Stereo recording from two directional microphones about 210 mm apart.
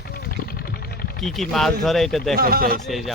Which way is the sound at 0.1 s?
45° left (ahead or behind).